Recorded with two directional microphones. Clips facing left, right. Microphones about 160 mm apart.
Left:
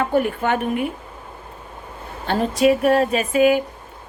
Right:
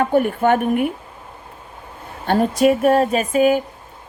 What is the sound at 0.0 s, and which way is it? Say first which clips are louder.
Speech: right 3 dB; 50° right (ahead or behind).